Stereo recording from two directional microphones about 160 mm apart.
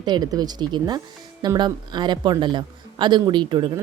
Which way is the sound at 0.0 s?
25° right (ahead or behind).